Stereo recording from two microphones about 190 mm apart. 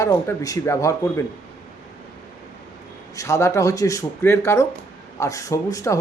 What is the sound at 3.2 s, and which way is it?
A man's voice, 15° left (ahead or behind).